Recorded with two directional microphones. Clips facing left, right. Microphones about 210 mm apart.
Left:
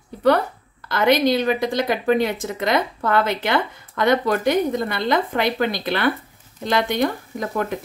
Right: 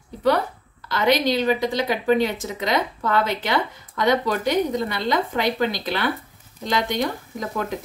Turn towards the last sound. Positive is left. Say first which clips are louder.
# left 3 dB
turn(degrees=55)  # may be behind; listen again after turning